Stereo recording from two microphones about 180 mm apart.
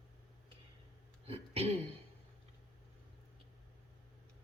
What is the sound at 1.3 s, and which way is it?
Speech, 35° right (ahead or behind).